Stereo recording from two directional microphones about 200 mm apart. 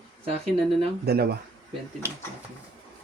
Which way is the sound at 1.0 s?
55° right (ahead or behind).